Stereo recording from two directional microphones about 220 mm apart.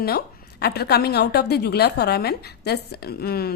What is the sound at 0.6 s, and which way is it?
A woman's voice, 45° left (ahead or behind).